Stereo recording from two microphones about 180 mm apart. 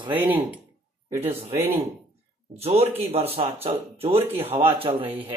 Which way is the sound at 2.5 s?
35° right (ahead or behind).